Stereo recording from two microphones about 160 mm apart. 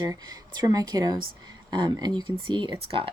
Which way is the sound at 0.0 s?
25° right (ahead or behind).